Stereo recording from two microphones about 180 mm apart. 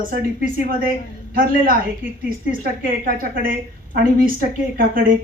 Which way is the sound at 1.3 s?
50° right (ahead or behind).